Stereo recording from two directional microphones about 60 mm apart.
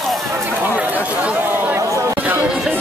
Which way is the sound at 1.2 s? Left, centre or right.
Right.